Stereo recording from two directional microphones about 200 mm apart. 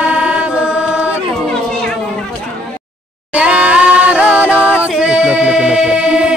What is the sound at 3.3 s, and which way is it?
A capella, 5° right (ahead or behind).